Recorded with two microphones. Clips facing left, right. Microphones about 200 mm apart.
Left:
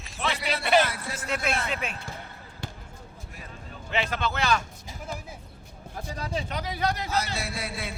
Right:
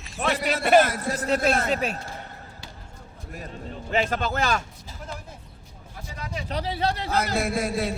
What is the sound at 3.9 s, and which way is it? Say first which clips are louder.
Speech: right 4 dB; 45° right (ahead or behind).